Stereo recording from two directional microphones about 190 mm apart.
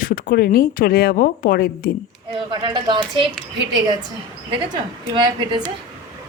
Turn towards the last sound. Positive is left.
turn(degrees=-25)  # may be behind; listen again after turning